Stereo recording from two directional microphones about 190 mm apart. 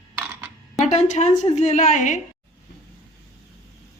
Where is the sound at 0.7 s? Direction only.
40° left (ahead or behind).